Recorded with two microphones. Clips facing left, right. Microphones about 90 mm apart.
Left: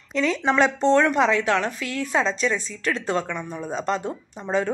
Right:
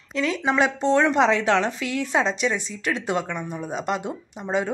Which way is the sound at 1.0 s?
25° right (ahead or behind).